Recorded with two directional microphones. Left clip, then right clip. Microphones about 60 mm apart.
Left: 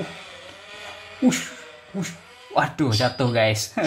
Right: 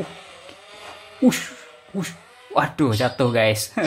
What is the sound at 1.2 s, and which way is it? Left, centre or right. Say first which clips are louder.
Speech: right 2 dB; right.